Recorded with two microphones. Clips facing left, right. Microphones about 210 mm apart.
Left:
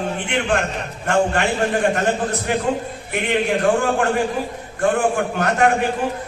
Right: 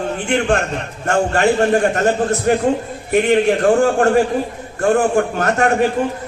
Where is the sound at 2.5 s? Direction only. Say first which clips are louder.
Right 7 dB; 45° right (ahead or behind).